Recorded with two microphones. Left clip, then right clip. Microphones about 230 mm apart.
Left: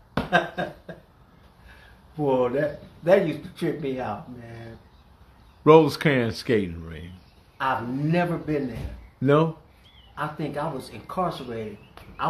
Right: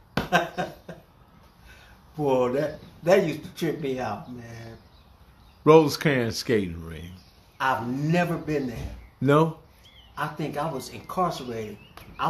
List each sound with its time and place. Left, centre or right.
0.1 s a sound: centre
2.1 s speech: centre
5.6 s speech: centre